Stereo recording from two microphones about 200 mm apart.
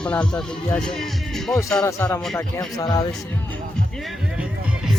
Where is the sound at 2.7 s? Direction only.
20° left (ahead or behind).